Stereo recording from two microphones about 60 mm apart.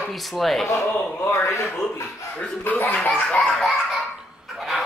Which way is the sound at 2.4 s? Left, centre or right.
Left.